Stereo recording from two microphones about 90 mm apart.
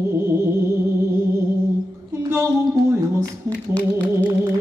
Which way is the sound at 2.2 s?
30° right (ahead or behind).